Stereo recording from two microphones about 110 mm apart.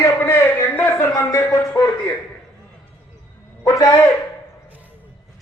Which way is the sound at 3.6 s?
30° left (ahead or behind).